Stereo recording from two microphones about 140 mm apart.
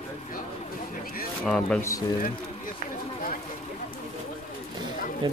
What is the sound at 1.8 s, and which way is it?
Speech, 20° left (ahead or behind).